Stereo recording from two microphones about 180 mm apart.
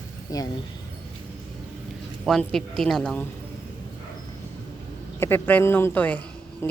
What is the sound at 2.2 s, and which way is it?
Speech, centre (ahead or behind).